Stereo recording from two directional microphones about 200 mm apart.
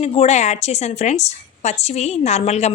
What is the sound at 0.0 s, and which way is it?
A woman's voice, 30° left (ahead or behind).